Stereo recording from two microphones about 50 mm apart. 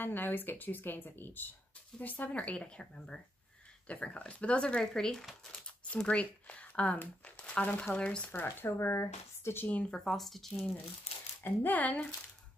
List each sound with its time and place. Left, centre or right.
0.0 s speech: left
4.7 s speech: centre
5.5 s a sound: left
7.8 s speech: centre
8.7 s speech: left
9.7 s speech: left
9.9 s speech: centre
11.4 s speech: left